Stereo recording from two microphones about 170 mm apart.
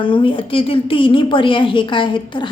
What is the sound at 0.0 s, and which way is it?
A woman's voice, 30° left (ahead or behind).